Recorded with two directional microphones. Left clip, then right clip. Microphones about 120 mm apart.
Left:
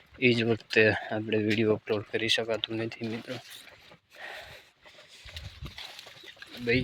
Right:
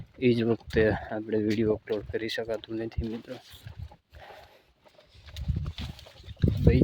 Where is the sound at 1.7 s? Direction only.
5° right (ahead or behind).